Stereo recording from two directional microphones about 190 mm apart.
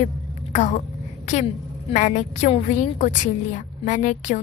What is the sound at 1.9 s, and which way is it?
A woman's voice, 40° left (ahead or behind).